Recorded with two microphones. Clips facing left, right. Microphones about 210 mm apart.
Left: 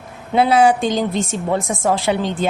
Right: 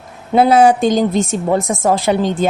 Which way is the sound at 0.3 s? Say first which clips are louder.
Right 3 dB; 45° right (ahead or behind).